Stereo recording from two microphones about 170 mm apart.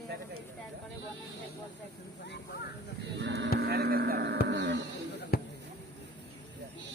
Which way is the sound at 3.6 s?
70° right (ahead or behind).